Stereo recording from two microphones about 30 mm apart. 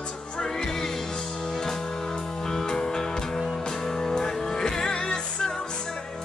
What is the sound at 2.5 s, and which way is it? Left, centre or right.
Music, left.